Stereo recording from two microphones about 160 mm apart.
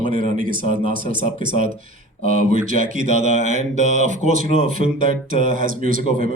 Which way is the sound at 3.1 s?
50° right (ahead or behind).